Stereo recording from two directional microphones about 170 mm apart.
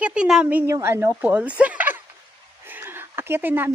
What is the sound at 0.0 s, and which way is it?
Speech, 5° right (ahead or behind).